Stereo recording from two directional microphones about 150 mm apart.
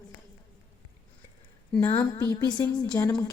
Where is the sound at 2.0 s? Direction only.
15° left (ahead or behind).